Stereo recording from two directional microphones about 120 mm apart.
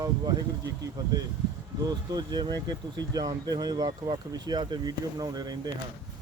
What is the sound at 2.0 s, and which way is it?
Speech, 35° right (ahead or behind).